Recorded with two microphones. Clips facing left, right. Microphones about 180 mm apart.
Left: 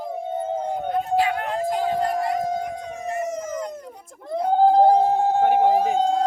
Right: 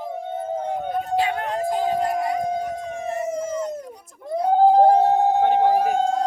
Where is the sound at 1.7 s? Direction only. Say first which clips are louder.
Right 1 dB; 15° right (ahead or behind).